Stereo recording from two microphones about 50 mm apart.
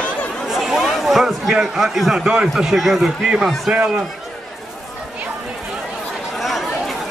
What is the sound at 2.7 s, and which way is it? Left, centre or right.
Speech, centre.